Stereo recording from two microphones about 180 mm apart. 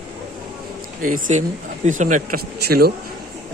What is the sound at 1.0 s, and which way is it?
Speech, 45° right (ahead or behind).